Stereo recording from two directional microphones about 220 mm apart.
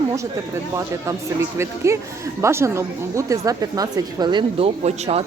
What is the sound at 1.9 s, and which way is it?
Speech, 15° right (ahead or behind).